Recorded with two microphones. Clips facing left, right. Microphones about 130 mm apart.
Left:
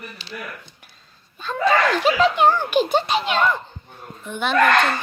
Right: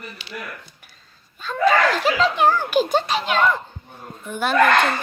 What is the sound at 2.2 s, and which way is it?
A woman's voice, centre (ahead or behind).